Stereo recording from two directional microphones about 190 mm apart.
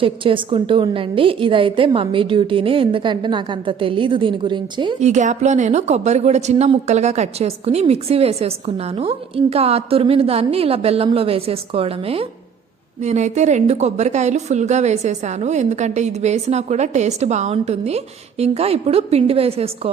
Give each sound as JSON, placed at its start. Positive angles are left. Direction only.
{"t": 0.0, "sound": "a woman's voice", "side_deg": -25}
{"t": 4.9, "sound": "a woman's voice", "side_deg": -40}